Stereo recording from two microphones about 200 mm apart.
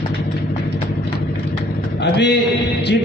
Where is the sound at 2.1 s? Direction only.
55° left (ahead or behind).